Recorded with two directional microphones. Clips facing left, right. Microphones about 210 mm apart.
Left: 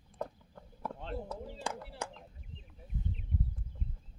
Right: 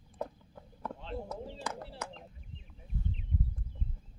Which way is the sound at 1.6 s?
30° left (ahead or behind).